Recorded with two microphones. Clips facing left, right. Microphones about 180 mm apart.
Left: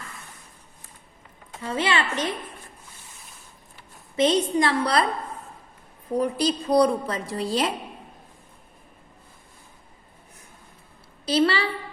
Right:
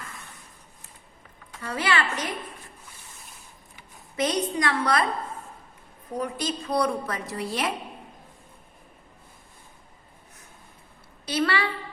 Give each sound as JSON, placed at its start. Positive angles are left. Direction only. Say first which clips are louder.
{"t": 1.5, "sound": "a woman's voice", "louder": "left 2 dB", "side_deg": 25}
{"t": 4.2, "sound": "a woman's voice", "louder": "left 5 dB", "side_deg": 25}
{"t": 6.1, "sound": "a woman's voice", "louder": "left 6 dB", "side_deg": 35}
{"t": 11.3, "sound": "a woman's voice", "louder": "left 4 dB", "side_deg": 30}